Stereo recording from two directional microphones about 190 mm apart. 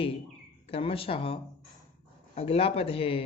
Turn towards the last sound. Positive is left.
turn(degrees=30)  # may be behind; listen again after turning